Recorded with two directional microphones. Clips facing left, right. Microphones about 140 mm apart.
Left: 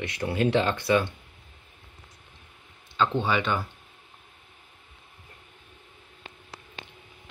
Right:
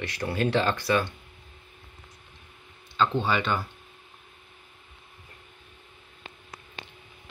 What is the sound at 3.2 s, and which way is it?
Speech, 10° left (ahead or behind).